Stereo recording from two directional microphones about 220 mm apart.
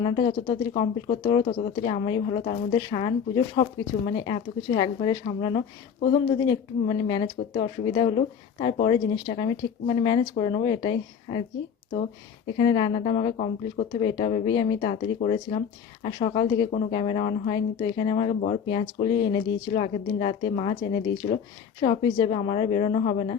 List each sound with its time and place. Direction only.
0.0 s speech: 20° left (ahead or behind)
12.5 s speech: 20° left (ahead or behind)
21.8 s speech: 25° left (ahead or behind)